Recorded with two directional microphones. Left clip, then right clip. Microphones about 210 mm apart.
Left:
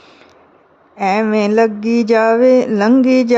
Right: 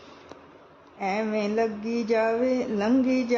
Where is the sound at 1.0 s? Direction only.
45° left (ahead or behind).